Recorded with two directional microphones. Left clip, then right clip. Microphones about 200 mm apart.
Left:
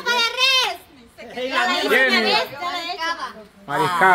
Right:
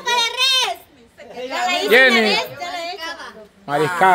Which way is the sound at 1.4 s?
35° right (ahead or behind).